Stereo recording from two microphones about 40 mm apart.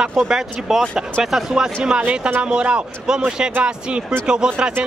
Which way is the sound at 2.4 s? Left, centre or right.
Right.